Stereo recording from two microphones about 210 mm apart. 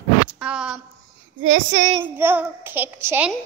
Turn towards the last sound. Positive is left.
turn(degrees=-10)  # may be behind; listen again after turning